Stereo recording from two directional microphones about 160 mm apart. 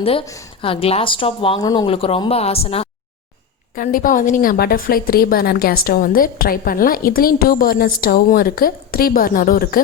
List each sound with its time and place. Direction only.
0.0 s speech: 35° left (ahead or behind)
1.9 s speech: 35° left (ahead or behind)
3.8 s a woman's voice: 60° left (ahead or behind)